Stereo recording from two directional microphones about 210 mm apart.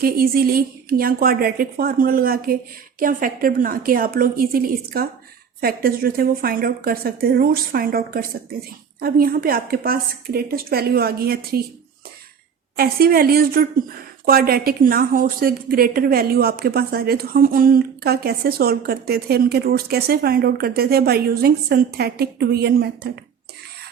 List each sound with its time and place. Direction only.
0.0 s a woman's voice: 45° right (ahead or behind)
12.7 s a woman's voice: 45° right (ahead or behind)